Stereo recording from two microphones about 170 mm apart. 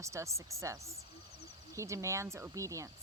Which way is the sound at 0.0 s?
15° right (ahead or behind).